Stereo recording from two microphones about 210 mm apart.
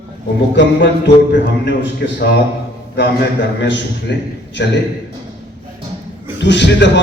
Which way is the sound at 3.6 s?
55° left (ahead or behind).